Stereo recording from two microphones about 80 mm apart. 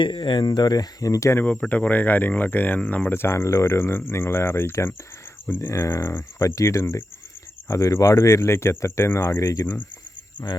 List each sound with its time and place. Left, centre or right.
0.0 s speech: left
1.5 s speech: centre; by 9.6 s left
10.4 s speech: centre